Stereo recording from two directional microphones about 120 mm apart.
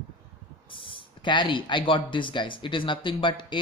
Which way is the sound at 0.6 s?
45° left (ahead or behind).